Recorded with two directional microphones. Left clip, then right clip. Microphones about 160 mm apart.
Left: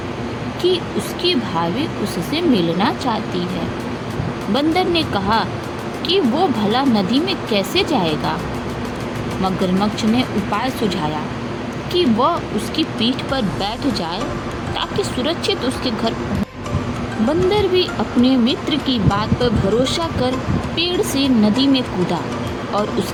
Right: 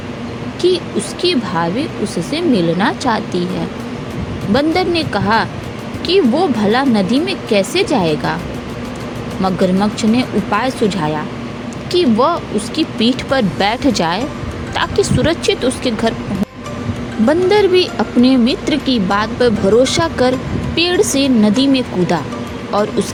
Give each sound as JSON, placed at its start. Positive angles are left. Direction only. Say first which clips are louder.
{"t": 0.6, "sound": "speech", "louder": "right 4 dB", "side_deg": -35}
{"t": 4.5, "sound": "speech", "louder": "right 3 dB", "side_deg": -35}
{"t": 9.4, "sound": "speech", "louder": "right 5 dB", "side_deg": -35}
{"t": 17.2, "sound": "speech", "louder": "right 5 dB", "side_deg": -40}